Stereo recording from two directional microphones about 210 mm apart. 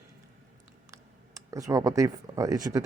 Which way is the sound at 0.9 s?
15° right (ahead or behind).